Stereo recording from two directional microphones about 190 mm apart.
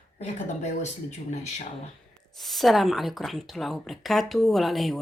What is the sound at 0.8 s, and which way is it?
Speech, 35° left (ahead or behind).